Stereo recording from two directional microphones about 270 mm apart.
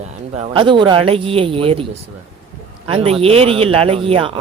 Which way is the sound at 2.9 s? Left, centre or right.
Right.